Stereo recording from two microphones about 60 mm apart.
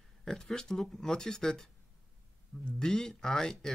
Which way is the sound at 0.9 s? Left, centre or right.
Centre.